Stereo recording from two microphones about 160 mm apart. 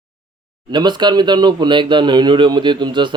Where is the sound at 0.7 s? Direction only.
30° right (ahead or behind).